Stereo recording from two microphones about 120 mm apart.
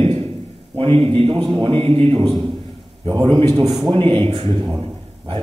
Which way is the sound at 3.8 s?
40° right (ahead or behind).